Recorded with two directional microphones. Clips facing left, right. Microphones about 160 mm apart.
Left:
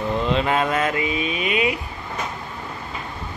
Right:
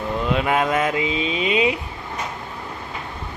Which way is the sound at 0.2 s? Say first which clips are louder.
Right 2 dB; 10° right (ahead or behind).